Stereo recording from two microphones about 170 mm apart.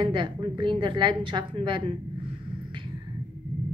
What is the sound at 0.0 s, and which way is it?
A woman's voice, 30° right (ahead or behind).